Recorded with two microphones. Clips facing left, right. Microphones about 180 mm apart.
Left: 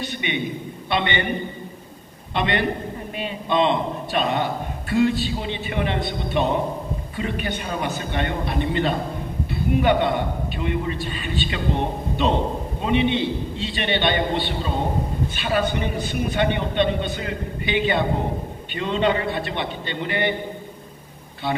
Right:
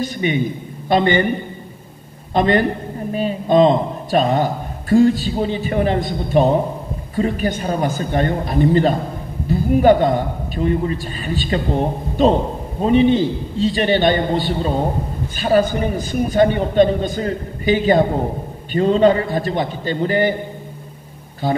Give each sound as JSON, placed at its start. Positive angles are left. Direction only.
{"t": 0.0, "sound": "a man's voice", "side_deg": -40}
{"t": 2.3, "sound": "a man's voice", "side_deg": -40}
{"t": 21.4, "sound": "a man's voice", "side_deg": -40}